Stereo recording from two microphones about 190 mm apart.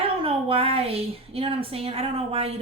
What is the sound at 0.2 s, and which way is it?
A woman's voice, 30° right (ahead or behind).